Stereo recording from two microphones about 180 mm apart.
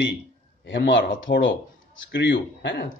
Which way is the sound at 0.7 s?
85° left.